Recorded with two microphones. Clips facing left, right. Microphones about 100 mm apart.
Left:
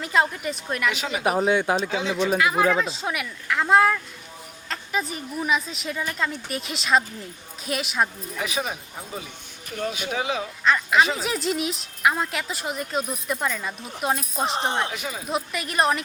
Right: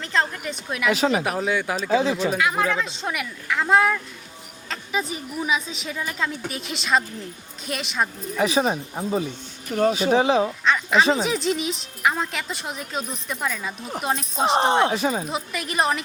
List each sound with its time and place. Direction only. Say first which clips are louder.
0.0 s speech: left 2 dB; 5° left (ahead or behind)
0.9 s speech: right 8 dB; 40° right (ahead or behind)
1.4 s speech: left 3 dB; 25° left (ahead or behind)
1.9 s speech: right 6 dB; 40° right (ahead or behind)
2.3 s speech: left 2 dB; centre (ahead or behind)
8.4 s speech: right 8 dB; 30° right (ahead or behind)
10.6 s speech: even; centre (ahead or behind)
14.5 s speech: right 11 dB; 35° right (ahead or behind)
15.3 s speech: left 1 dB; centre (ahead or behind)